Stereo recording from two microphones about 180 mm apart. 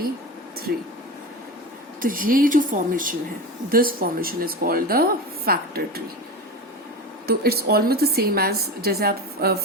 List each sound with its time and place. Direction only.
2.0 s a woman's voice: 50° right (ahead or behind)
7.3 s a woman's voice: 60° right (ahead or behind)